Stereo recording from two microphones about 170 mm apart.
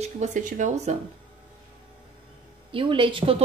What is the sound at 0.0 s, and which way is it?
Speech, 45° right (ahead or behind).